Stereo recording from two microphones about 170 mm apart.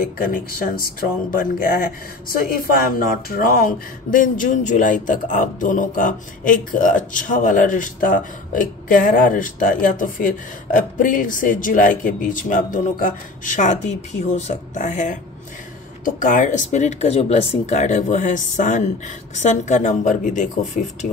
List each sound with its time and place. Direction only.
0.0 s speech: 60° left (ahead or behind)